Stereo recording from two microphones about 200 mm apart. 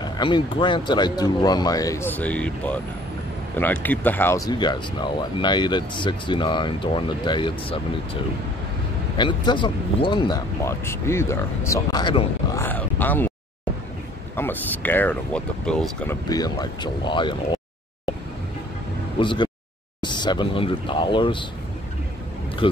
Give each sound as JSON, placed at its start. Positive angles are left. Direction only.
{"t": 0.0, "sound": "speech", "side_deg": 25}
{"t": 3.8, "sound": "speech", "side_deg": 10}
{"t": 9.1, "sound": "speech", "side_deg": 20}
{"t": 12.6, "sound": "speech", "side_deg": 10}
{"t": 14.3, "sound": "speech", "side_deg": 10}
{"t": 16.3, "sound": "speech", "side_deg": 20}
{"t": 19.1, "sound": "speech", "side_deg": 25}
{"t": 22.6, "sound": "speech", "side_deg": 25}